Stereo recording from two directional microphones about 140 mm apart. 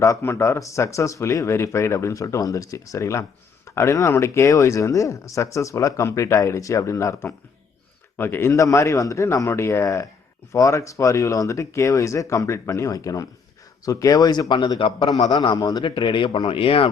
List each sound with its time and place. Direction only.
0.0 s speech: 20° left (ahead or behind)
16.0 s speech: 35° left (ahead or behind)